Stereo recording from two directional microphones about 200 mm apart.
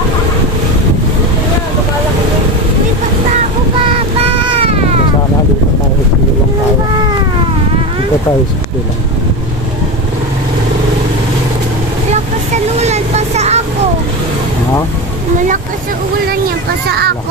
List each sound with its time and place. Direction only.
3.3 s a sound: 25° right (ahead or behind)
4.4 s cat: 30° right (ahead or behind)
12.8 s vehicle: 35° right (ahead or behind)
15.4 s speech: 40° right (ahead or behind)
16.9 s speech: 55° right (ahead or behind)